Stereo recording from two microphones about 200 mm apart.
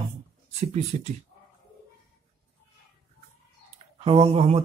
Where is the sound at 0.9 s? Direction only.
35° right (ahead or behind).